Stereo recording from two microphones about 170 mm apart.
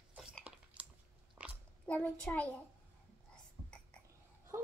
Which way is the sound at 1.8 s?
10° left (ahead or behind).